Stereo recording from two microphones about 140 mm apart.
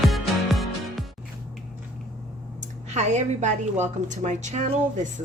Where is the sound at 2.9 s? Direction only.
55° right (ahead or behind).